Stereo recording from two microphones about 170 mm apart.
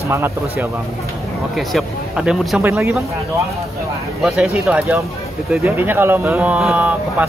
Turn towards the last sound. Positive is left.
turn(degrees=-10)  # may be behind; listen again after turning